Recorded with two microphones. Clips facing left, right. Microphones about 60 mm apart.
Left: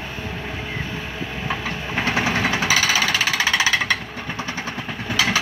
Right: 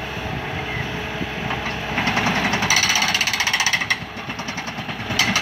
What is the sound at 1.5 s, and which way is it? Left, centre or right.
Vehicle, centre.